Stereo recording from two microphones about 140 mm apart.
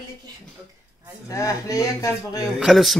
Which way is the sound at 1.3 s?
25° left (ahead or behind).